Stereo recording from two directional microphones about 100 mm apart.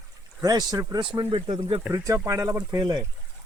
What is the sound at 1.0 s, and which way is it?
Speech, 55° right (ahead or behind).